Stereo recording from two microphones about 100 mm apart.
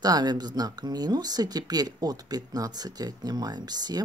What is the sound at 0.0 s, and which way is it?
Speech, 40° right (ahead or behind).